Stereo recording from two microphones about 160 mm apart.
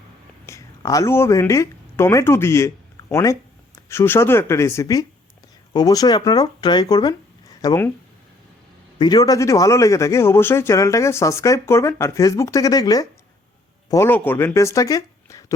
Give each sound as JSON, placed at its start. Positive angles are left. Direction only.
{"t": 0.4, "sound": "speech", "side_deg": 20}
{"t": 9.0, "sound": "a man's voice", "side_deg": 25}